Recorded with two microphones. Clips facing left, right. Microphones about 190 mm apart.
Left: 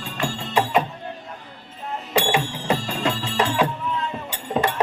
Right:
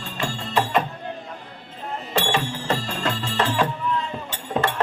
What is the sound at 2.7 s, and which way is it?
Music, centre (ahead or behind).